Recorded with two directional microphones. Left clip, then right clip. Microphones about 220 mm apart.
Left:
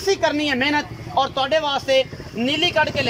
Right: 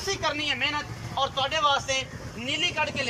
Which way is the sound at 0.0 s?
30° left (ahead or behind).